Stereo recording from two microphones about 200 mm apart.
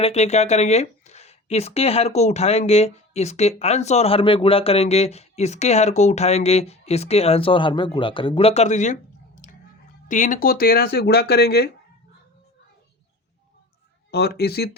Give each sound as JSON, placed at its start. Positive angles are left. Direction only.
{"t": 0.0, "sound": "speech", "side_deg": 35}
{"t": 14.1, "sound": "speech", "side_deg": 55}